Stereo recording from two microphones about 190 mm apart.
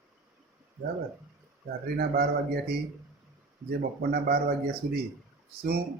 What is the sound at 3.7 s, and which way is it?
Speech, 55° right (ahead or behind).